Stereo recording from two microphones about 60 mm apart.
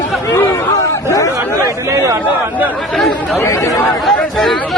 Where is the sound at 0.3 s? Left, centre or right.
Left.